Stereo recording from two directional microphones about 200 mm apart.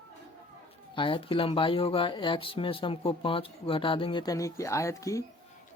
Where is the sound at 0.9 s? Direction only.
25° left (ahead or behind).